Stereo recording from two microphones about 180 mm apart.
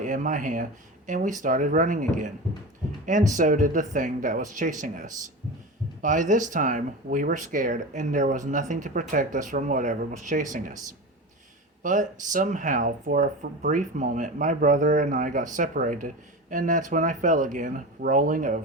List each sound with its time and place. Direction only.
0.0 s speech: 45° right (ahead or behind)
11.8 s speech: 45° right (ahead or behind)